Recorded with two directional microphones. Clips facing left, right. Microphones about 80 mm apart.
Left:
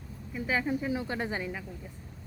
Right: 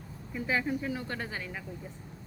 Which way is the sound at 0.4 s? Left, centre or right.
Centre.